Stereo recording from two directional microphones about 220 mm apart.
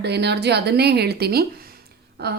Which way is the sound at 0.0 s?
50° right (ahead or behind).